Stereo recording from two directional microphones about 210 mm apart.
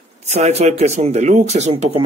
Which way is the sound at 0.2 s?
30° right (ahead or behind).